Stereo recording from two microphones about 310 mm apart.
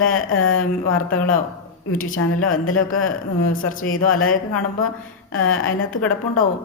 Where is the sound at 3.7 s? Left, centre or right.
Left.